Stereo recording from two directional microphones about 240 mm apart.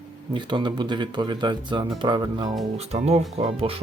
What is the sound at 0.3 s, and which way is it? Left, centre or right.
Speech, centre.